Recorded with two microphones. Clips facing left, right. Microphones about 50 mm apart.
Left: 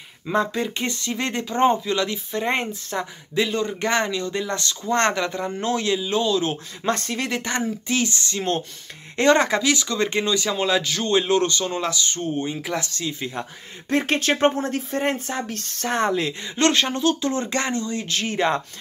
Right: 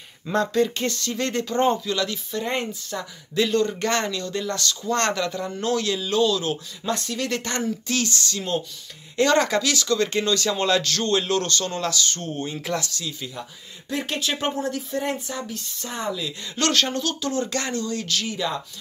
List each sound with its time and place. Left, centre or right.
0.3 s speech: centre; by 3.1 s left
3.4 s speech: centre; by 7.2 s left
7.2 s speech: centre
12.7 s speech: left
16.5 s speech: left
18.3 s speech: left